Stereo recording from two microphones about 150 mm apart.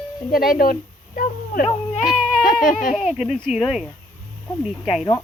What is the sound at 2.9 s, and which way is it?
Speech, 5° right (ahead or behind).